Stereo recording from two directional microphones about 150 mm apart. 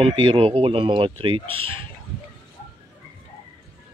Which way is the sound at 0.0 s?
35° right (ahead or behind).